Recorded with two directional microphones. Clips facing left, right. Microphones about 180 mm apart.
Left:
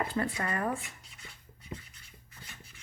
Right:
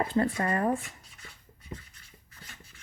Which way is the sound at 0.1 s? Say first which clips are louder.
Right 5 dB; 25° right (ahead or behind).